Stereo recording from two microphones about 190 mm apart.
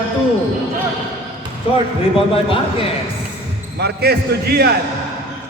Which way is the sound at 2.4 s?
30° left (ahead or behind).